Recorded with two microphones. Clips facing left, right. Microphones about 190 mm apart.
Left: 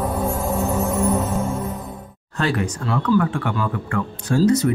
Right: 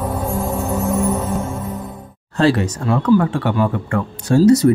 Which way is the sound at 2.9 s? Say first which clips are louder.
Right 5 dB; 45° right (ahead or behind).